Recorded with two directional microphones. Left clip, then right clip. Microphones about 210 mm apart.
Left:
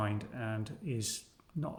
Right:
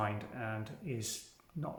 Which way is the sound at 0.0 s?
45° left (ahead or behind).